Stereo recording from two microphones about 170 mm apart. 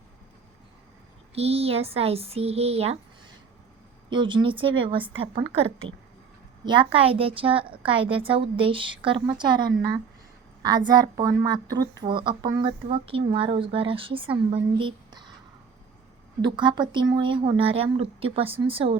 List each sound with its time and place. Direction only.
1.4 s speech: 35° right (ahead or behind)
4.1 s speech: 30° right (ahead or behind)
10.6 s a woman's voice: 25° right (ahead or behind)
16.4 s a woman's voice: 25° right (ahead or behind)